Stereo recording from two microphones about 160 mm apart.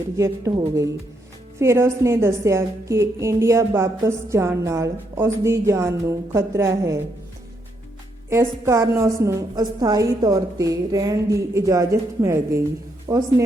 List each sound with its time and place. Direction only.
0.2 s a woman's voice: 20° right (ahead or behind)
8.3 s a woman's voice: 15° right (ahead or behind)